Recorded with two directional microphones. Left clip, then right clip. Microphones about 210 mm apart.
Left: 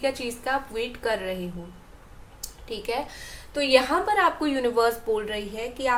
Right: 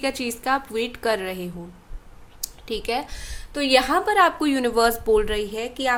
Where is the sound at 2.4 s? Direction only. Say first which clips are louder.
Right 5 dB; 50° right (ahead or behind).